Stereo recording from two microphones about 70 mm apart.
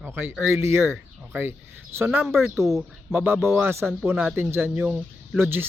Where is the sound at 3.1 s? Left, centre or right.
Right.